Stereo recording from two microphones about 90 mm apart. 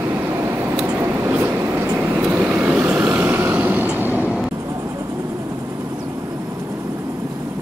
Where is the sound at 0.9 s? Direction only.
25° right (ahead or behind).